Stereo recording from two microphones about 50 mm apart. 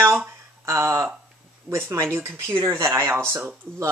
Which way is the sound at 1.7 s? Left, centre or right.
Right.